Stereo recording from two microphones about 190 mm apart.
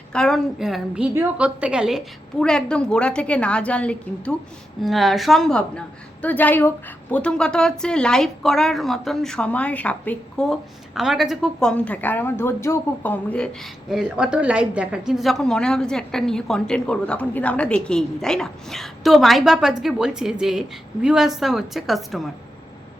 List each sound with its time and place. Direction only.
0.1 s speech: 5° left (ahead or behind)
13.9 s speech: 5° right (ahead or behind)